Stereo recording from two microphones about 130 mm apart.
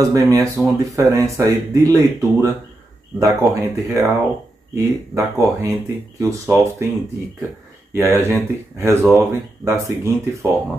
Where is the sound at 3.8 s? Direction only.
20° right (ahead or behind).